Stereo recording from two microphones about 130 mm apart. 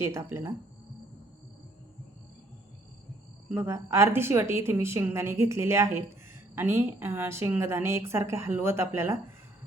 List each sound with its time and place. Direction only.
0.0 s a woman's voice: 20° right (ahead or behind)
3.5 s a woman's voice: 20° right (ahead or behind)